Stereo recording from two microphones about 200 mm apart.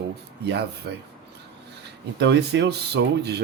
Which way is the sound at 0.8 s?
50° right (ahead or behind).